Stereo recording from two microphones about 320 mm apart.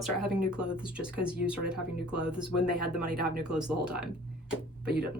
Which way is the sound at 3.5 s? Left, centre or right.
Centre.